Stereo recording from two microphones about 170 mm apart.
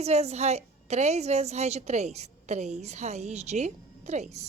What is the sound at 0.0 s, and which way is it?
A woman's voice, 40° right (ahead or behind).